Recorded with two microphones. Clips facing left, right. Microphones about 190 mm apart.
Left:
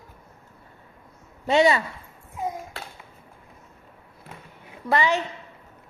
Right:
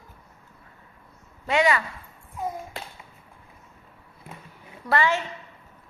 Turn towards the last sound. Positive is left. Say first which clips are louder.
# left 1 dB
turn(degrees=15)  # may be behind; listen again after turning